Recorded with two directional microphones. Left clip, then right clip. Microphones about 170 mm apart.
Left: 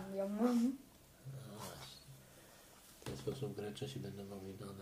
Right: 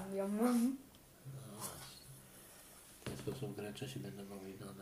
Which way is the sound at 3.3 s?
30° left (ahead or behind).